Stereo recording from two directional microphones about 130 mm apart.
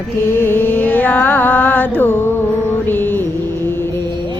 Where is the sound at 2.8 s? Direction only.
15° left (ahead or behind).